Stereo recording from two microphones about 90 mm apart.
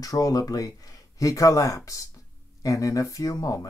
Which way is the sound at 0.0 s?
40° left (ahead or behind).